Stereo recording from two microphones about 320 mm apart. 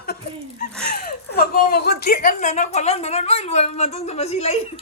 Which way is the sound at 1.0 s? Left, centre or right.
Left.